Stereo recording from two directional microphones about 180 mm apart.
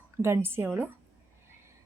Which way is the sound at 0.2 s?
15° right (ahead or behind).